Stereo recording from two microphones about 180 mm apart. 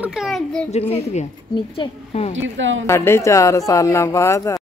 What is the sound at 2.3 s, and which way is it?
Speech, 90° right.